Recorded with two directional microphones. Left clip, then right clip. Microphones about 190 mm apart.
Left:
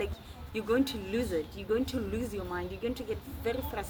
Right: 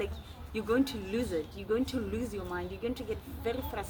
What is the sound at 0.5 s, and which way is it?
Speech, 15° right (ahead or behind).